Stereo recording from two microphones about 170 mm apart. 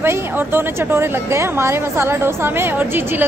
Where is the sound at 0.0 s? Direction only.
15° right (ahead or behind).